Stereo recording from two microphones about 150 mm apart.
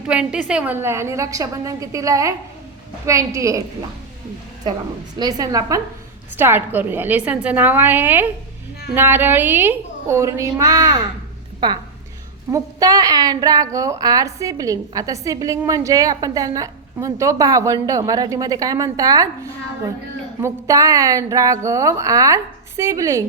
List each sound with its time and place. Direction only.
0.1 s a woman's voice: 5° right (ahead or behind)
5.2 s a woman's voice: 25° right (ahead or behind)
20.4 s a woman's voice: 20° right (ahead or behind)